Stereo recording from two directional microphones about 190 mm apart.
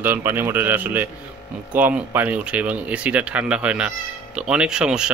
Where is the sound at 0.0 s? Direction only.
10° right (ahead or behind).